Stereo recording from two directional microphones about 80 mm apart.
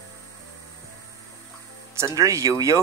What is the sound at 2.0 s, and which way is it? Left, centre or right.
Speech, right.